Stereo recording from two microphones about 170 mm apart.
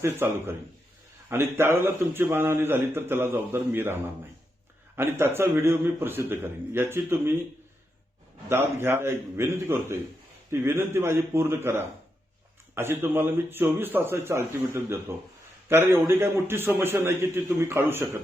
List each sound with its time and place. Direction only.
0.0 s a man's voice: 15° right (ahead or behind)
8.4 s a man's voice: 15° right (ahead or behind)
12.7 s a man's voice: 15° right (ahead or behind)